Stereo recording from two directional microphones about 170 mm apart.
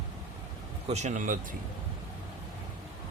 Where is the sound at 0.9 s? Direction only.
40° right (ahead or behind).